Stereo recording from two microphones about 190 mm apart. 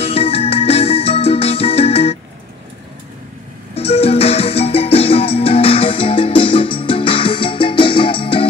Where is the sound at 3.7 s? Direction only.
30° left (ahead or behind).